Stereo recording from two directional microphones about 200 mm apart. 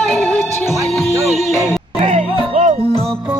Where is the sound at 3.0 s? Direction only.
Centre (ahead or behind).